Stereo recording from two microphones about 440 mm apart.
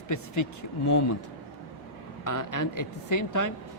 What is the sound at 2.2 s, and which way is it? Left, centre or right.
A woman's voice, left.